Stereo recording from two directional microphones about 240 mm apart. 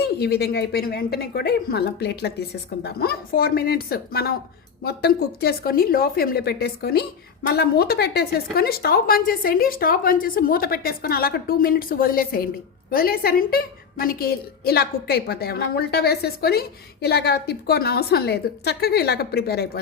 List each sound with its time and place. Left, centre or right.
0.0 s a woman's voice: left